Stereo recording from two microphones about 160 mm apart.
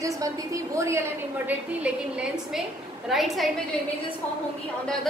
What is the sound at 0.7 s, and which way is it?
A woman's voice, 15° right (ahead or behind).